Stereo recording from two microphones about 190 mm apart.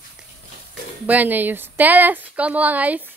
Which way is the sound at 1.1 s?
10° right (ahead or behind).